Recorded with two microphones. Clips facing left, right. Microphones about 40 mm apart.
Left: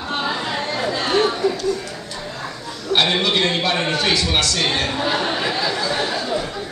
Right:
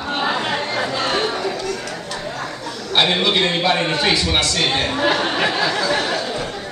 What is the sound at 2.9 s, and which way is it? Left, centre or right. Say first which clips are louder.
Speech: right 1 dB; centre.